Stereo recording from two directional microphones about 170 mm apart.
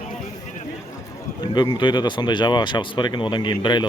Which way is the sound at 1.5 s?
25° left (ahead or behind).